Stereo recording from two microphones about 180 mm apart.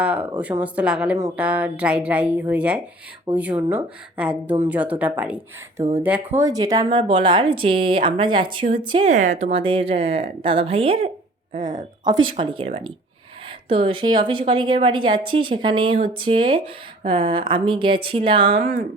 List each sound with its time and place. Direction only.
0.0 s a woman's voice: 5° right (ahead or behind); by 9.0 s 30° right (ahead or behind)
9.0 s speech: 40° right (ahead or behind)
12.3 s speech: 30° right (ahead or behind)